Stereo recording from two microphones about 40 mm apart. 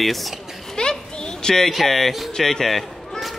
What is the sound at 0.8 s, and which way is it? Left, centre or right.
Children playing, centre.